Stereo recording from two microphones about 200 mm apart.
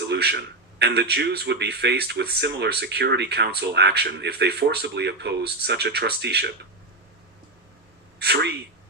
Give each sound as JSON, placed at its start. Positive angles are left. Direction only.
{"t": 0.1, "sound": "speech", "side_deg": -55}
{"t": 8.2, "sound": "speech", "side_deg": -55}